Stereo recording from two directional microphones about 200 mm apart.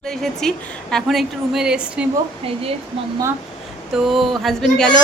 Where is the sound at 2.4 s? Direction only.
30° right (ahead or behind).